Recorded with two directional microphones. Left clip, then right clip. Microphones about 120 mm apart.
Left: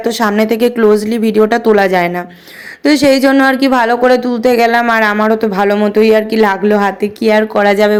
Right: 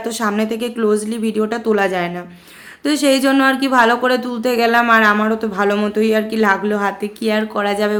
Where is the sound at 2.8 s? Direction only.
45° left (ahead or behind).